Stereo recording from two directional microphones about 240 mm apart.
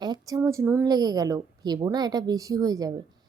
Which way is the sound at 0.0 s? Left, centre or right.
Centre.